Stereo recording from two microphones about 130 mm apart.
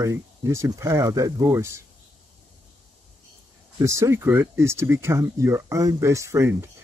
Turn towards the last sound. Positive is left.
turn(degrees=-20)  # may be behind; listen again after turning